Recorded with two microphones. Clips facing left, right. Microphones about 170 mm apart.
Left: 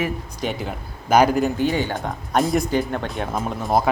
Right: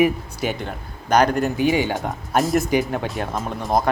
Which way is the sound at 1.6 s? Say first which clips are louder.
Right 2 dB; 10° right (ahead or behind).